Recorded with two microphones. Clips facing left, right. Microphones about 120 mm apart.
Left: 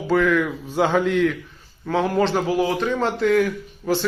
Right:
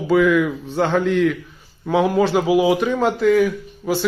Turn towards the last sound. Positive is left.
turn(degrees=-5)  # may be behind; listen again after turning